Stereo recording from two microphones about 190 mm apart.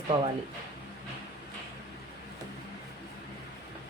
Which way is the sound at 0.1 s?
40° right (ahead or behind).